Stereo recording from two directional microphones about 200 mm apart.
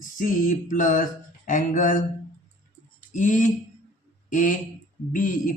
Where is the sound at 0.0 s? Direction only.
40° left (ahead or behind).